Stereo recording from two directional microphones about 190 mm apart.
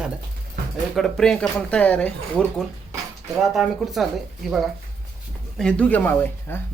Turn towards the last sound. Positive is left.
turn(degrees=10)  # may be behind; listen again after turning